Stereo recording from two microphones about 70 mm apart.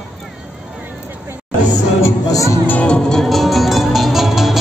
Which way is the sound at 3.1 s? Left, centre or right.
Centre.